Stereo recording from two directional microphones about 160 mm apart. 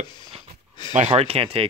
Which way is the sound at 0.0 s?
30° left (ahead or behind).